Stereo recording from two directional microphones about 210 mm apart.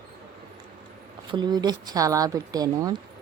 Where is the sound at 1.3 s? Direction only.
20° right (ahead or behind).